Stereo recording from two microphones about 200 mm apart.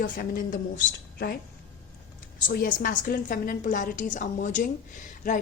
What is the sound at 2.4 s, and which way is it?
A woman's voice, 45° left (ahead or behind).